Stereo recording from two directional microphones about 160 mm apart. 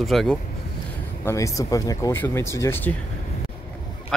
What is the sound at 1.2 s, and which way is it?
Speech, 20° left (ahead or behind).